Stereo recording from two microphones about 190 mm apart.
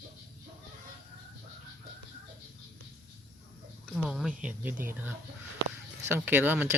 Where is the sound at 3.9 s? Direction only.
Centre (ahead or behind).